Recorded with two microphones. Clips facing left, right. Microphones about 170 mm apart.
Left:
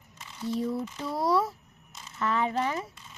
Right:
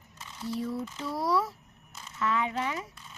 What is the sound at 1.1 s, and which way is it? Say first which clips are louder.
Speech: left 3 dB; 25° left (ahead or behind).